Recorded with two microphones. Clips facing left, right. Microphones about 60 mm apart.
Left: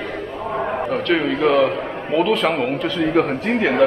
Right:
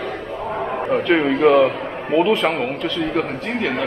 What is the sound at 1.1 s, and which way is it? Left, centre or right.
A man's voice, centre.